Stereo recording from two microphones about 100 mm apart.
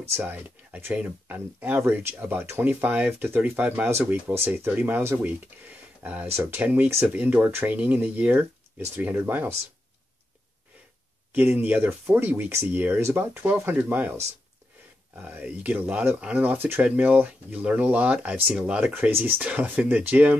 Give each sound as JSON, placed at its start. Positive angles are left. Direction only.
{"t": 0.1, "sound": "speech", "side_deg": -20}
{"t": 11.5, "sound": "speech", "side_deg": -15}